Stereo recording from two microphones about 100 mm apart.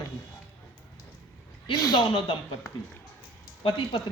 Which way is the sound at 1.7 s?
40° left (ahead or behind).